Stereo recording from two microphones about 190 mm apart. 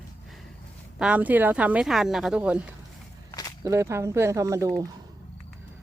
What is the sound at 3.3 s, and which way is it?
Walk, 20° left (ahead or behind).